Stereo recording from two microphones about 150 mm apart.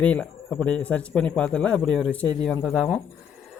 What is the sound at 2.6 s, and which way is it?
Speech, centre (ahead or behind).